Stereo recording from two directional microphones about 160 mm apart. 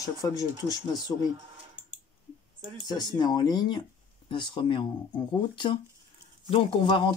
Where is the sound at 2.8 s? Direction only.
25° left (ahead or behind).